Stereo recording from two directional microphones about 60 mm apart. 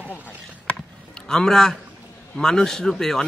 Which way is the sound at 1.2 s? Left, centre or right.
Centre.